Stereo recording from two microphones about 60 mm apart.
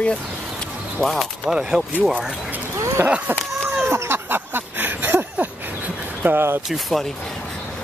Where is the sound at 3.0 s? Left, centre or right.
Right.